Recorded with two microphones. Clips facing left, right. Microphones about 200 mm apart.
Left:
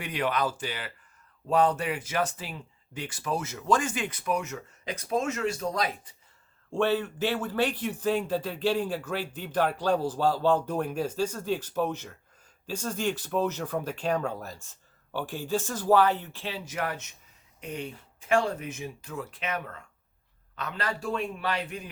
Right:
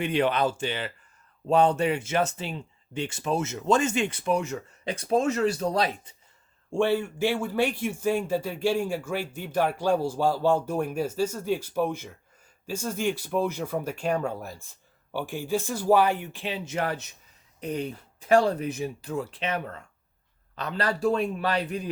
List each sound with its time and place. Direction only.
0.0 s speech: 30° right (ahead or behind)
6.7 s speech: 10° right (ahead or behind); by 21.8 s 35° right (ahead or behind)